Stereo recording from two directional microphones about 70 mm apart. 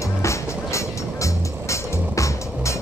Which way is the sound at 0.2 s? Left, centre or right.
Left.